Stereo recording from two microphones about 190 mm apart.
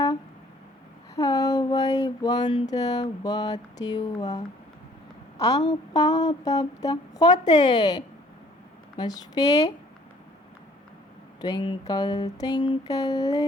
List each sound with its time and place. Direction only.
1.1 s a sound: 15° left (ahead or behind)
5.6 s a woman's voice: 20° left (ahead or behind)
11.3 s a woman's voice: 20° left (ahead or behind)